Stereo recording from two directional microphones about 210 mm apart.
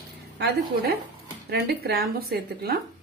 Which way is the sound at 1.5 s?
45° right (ahead or behind).